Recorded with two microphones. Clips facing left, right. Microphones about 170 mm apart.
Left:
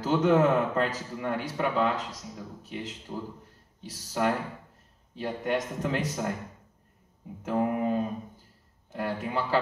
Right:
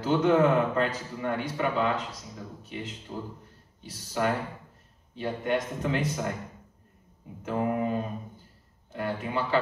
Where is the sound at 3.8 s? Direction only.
40° left (ahead or behind).